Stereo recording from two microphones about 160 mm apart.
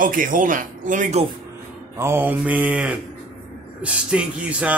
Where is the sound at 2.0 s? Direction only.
15° right (ahead or behind).